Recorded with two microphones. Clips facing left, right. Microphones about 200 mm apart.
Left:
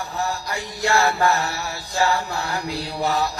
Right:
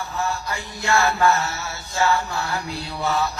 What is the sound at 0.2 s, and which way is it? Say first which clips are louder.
Mantra: even; 35° left (ahead or behind).